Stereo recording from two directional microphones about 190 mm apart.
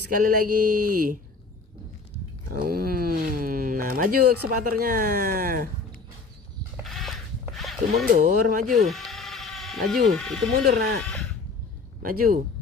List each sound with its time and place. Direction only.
0.0 s speech: 50° right (ahead or behind)
2.5 s speech: 50° right (ahead or behind)
6.8 s a sound: centre (ahead or behind)
8.2 s speech: 45° right (ahead or behind)
8.7 s bleat: centre (ahead or behind)
10.1 s speech: centre (ahead or behind)
11.0 s a sound: centre (ahead or behind)
12.0 s speech: 50° right (ahead or behind)